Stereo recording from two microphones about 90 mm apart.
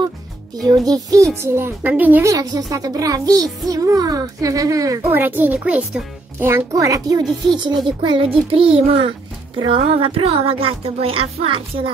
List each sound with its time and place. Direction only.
0.6 s a child's voice: 45° right (ahead or behind); by 2.2 s 20° right (ahead or behind)
2.2 s a child's voice: 45° right (ahead or behind)
5.1 s a child's voice: 20° right (ahead or behind)
6.7 s speech: 40° right (ahead or behind)
7.2 s speech: 55° right (ahead or behind)
8.5 s music: 90° right